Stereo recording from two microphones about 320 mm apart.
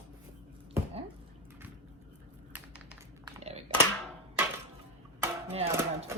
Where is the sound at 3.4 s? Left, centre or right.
Centre.